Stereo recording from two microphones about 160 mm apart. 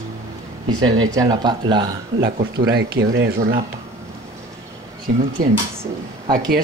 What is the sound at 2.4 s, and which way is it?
Speech, 90° right.